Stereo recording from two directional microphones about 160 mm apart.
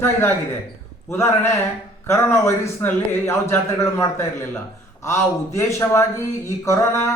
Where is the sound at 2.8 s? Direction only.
15° left (ahead or behind).